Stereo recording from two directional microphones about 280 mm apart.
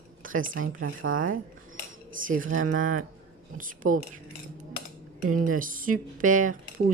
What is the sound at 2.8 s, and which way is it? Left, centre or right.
Speech, right.